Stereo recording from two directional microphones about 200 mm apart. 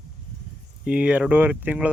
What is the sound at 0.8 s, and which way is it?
Speech, 5° right (ahead or behind).